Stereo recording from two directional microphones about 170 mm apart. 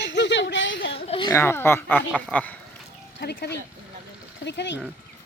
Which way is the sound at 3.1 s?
75° left (ahead or behind).